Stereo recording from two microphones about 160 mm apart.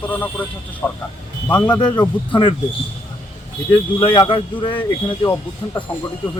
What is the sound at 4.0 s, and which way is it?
Speech, 30° left (ahead or behind).